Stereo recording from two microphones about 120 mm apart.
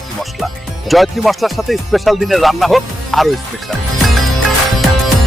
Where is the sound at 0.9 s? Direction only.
Centre (ahead or behind).